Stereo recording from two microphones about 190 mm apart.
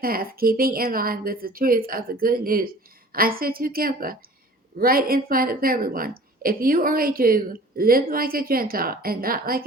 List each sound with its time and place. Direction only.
0.0 s a woman's voice: 50° right (ahead or behind)